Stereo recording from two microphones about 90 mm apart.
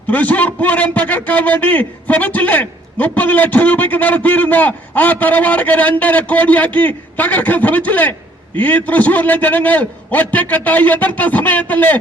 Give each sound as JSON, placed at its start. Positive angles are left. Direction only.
{"t": 0.1, "sound": "a man's voice", "side_deg": 15}